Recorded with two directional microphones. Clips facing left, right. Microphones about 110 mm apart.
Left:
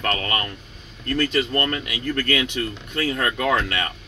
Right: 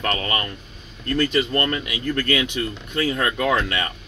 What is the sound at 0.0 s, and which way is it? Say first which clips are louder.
Speech: even; 15° right (ahead or behind).